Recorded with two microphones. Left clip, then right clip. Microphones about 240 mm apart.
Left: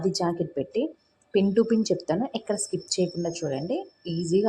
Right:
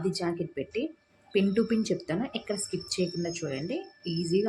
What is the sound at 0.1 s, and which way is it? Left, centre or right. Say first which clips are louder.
Speech: left 5 dB; centre.